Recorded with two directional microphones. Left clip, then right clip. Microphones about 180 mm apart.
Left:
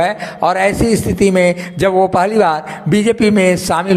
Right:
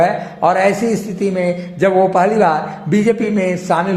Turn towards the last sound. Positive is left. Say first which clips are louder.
# left 3 dB
turn(degrees=30)  # may be behind; listen again after turning